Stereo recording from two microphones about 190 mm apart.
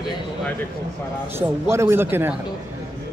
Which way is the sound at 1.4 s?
15° right (ahead or behind).